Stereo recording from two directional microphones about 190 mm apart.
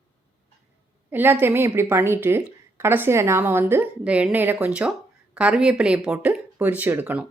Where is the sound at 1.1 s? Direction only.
10° right (ahead or behind).